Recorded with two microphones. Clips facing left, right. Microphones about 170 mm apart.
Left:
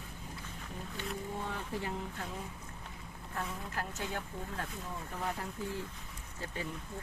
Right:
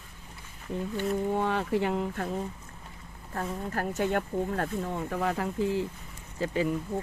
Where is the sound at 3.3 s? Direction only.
45° right (ahead or behind).